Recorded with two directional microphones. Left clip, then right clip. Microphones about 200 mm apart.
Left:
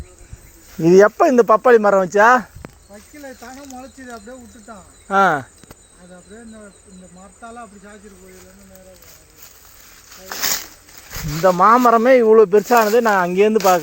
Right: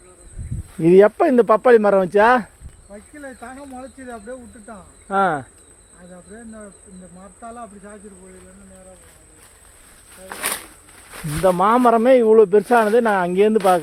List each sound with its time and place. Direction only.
0.8 s speech: 5° right (ahead or behind)
2.9 s speech: centre (ahead or behind)
5.0 s speech: 25° left (ahead or behind)
7.2 s speech: 15° right (ahead or behind)
10.2 s speech: 45° left (ahead or behind)
11.4 s speech: 5° left (ahead or behind)